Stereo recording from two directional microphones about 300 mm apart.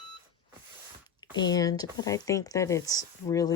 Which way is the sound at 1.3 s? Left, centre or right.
Centre.